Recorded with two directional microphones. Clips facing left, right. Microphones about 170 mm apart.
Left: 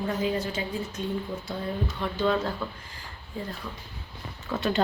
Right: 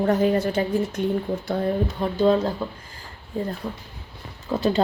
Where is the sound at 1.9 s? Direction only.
35° right (ahead or behind).